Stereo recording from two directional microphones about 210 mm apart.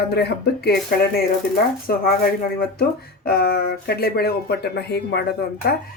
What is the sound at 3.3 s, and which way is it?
Speech, 45° left (ahead or behind).